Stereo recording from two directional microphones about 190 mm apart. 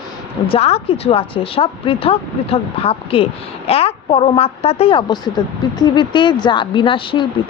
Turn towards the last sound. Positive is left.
turn(degrees=25)  # may be behind; listen again after turning